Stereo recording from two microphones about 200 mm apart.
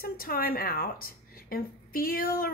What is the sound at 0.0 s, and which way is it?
A woman's voice, 45° left (ahead or behind).